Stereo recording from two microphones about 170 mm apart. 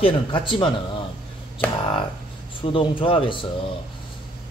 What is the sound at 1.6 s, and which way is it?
Speech, 10° left (ahead or behind).